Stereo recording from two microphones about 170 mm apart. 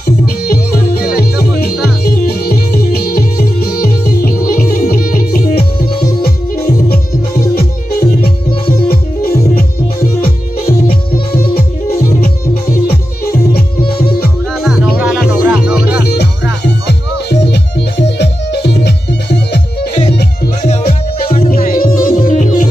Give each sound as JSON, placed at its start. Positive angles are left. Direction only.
{"t": 0.5, "sound": "music", "side_deg": 60}
{"t": 10.9, "sound": "music", "side_deg": 60}
{"t": 13.6, "sound": "music", "side_deg": 65}
{"t": 14.6, "sound": "music", "side_deg": -5}
{"t": 16.0, "sound": "music", "side_deg": 70}
{"t": 21.5, "sound": "music", "side_deg": 55}